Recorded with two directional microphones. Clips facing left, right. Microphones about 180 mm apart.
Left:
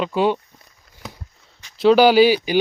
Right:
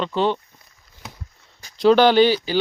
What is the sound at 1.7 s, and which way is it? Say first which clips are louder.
Speech: left 1 dB; 5° left (ahead or behind).